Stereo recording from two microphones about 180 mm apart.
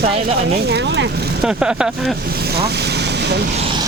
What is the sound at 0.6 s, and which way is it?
Speech, 65° right (ahead or behind).